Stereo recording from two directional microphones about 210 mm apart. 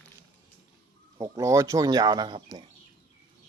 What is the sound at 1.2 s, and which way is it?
Speech, 15° right (ahead or behind).